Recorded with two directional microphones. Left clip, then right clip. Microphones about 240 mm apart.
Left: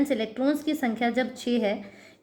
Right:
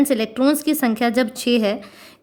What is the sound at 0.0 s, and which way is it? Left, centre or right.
A woman's voice, right.